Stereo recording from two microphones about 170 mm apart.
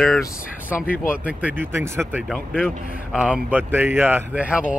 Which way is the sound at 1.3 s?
10° right (ahead or behind).